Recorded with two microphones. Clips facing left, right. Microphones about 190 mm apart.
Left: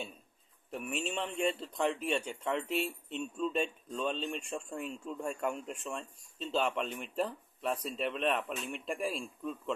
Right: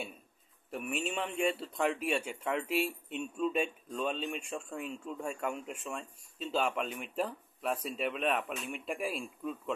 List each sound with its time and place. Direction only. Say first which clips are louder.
0.7 s a man's voice: right 1 dB; centre (ahead or behind)